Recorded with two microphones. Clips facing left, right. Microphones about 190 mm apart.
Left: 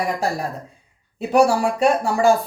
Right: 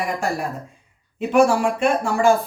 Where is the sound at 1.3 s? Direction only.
40° left (ahead or behind).